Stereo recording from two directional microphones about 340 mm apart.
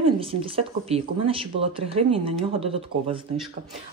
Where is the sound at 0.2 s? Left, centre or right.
Centre.